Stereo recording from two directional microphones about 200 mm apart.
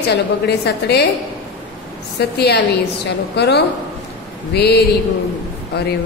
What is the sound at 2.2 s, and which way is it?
A woman's voice, 55° left (ahead or behind).